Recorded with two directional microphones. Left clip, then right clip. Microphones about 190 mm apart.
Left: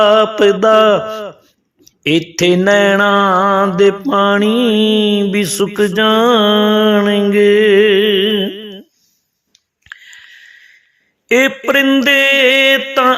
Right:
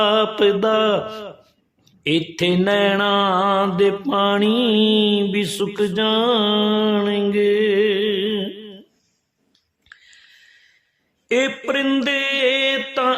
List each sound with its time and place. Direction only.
0.0 s a man's voice: 20° left (ahead or behind)
9.5 s a sound: 35° left (ahead or behind)
11.3 s mantra: 35° left (ahead or behind)